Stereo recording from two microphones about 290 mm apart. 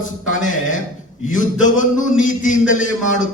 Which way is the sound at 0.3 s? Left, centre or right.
Left.